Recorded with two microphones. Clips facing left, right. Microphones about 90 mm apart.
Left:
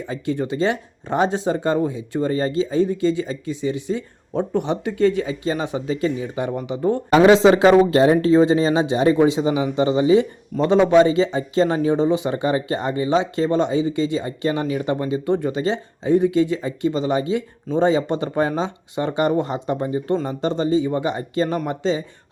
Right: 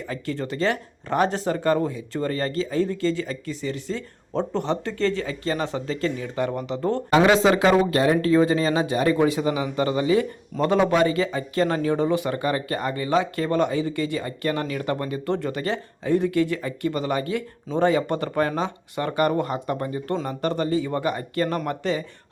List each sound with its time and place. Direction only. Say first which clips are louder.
0.0 s speech: left 5 dB; 20° left (ahead or behind)
7.1 s speech: left 5 dB; 25° left (ahead or behind)